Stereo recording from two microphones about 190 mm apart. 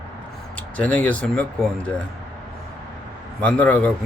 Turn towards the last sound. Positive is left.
turn(degrees=5)  # may be behind; listen again after turning